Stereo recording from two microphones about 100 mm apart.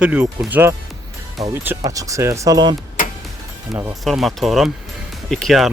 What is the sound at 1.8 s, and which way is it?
Speech, 35° right (ahead or behind).